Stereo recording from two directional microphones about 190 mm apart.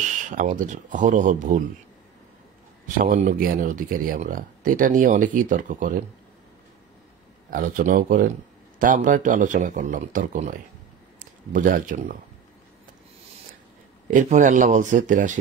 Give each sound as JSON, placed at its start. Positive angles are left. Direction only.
{"t": 0.3, "sound": "speech", "side_deg": -45}
{"t": 3.0, "sound": "speech", "side_deg": -45}
{"t": 7.5, "sound": "a man's voice", "side_deg": -45}
{"t": 14.0, "sound": "speech", "side_deg": -40}